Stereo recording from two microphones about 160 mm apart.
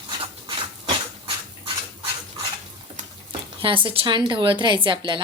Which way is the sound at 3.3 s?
35° right (ahead or behind).